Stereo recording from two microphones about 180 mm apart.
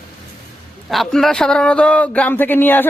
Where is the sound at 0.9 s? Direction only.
Centre (ahead or behind).